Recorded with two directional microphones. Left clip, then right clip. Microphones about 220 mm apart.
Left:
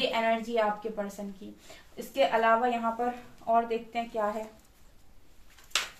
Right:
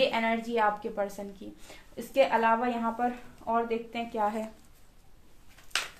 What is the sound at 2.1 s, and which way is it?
A woman's voice, 45° right (ahead or behind).